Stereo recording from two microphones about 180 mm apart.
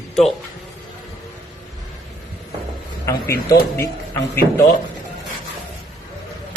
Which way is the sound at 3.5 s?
15° left (ahead or behind).